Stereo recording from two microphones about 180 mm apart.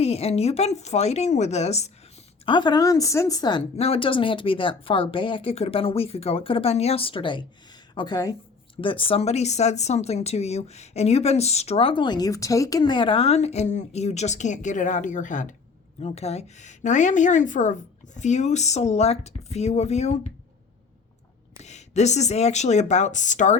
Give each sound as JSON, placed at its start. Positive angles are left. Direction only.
{"t": 0.0, "sound": "speech", "side_deg": 35}
{"t": 2.5, "sound": "a woman's voice", "side_deg": 25}
{"t": 3.8, "sound": "a woman's voice", "side_deg": 35}
{"t": 21.6, "sound": "speech", "side_deg": 40}